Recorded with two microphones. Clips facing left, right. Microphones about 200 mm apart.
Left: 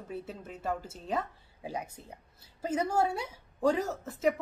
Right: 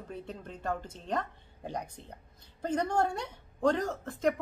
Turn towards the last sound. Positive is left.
turn(degrees=5)  # may be behind; listen again after turning